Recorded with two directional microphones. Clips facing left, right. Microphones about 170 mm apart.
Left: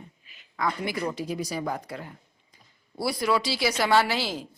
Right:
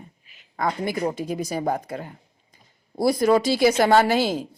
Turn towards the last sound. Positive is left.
turn(degrees=-50)  # may be behind; listen again after turning